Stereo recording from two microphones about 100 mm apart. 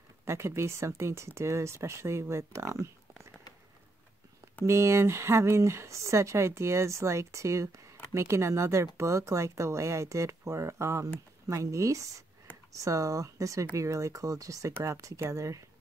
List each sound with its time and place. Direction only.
0.2 s speech: 25° right (ahead or behind)
4.6 s speech: 30° right (ahead or behind)